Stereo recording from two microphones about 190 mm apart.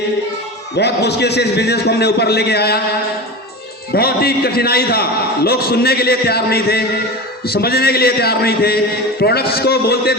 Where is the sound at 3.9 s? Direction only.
55° left (ahead or behind).